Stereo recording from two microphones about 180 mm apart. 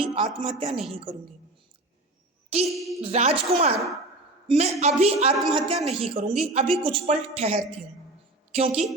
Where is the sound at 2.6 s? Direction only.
Centre (ahead or behind).